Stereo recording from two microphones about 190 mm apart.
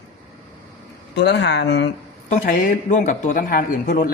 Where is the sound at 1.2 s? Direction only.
65° left (ahead or behind).